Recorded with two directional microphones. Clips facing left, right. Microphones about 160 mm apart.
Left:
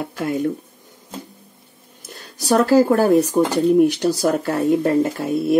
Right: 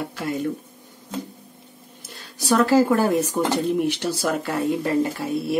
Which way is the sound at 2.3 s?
40° left (ahead or behind).